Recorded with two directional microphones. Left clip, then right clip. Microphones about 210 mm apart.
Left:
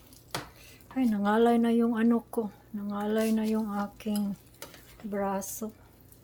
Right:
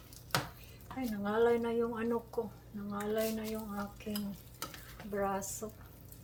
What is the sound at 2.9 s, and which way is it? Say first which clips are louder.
Dishes: left 6 dB; 55° left (ahead or behind).